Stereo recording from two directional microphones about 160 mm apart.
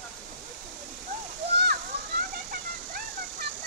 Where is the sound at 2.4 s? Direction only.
70° right (ahead or behind).